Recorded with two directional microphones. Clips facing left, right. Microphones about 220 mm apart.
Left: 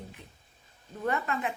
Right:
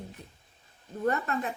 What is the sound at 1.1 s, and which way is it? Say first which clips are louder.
Speech: right 1 dB; 40° right (ahead or behind).